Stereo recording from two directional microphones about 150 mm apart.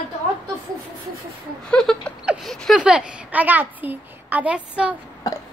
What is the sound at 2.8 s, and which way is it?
A woman's voice, 5° right (ahead or behind).